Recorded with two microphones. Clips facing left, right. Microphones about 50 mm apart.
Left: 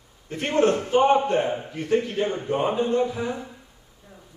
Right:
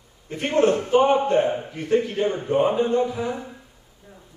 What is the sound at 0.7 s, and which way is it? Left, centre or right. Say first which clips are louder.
Speech: right 1 dB; centre.